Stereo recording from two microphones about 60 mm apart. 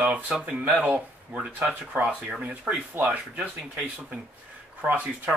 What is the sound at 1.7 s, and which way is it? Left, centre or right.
Speech, right.